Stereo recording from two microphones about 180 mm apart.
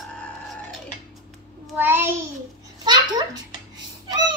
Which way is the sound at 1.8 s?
10° right (ahead or behind).